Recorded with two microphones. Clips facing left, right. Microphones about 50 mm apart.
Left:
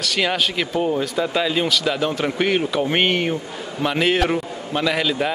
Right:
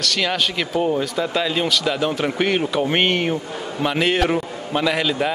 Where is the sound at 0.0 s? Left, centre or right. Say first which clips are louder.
Even; centre.